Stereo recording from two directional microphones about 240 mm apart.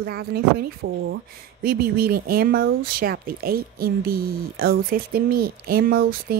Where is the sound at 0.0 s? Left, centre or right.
Right.